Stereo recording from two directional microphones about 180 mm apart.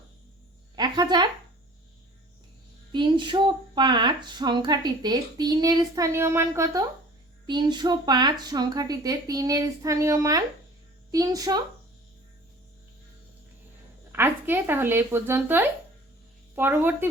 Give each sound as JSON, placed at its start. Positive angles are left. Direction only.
{"t": 0.8, "sound": "a woman's voice", "side_deg": -25}
{"t": 2.9, "sound": "speech", "side_deg": -25}
{"t": 14.1, "sound": "speech", "side_deg": -10}